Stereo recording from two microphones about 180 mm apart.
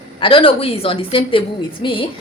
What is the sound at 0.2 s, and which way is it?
A woman's voice, 30° left (ahead or behind).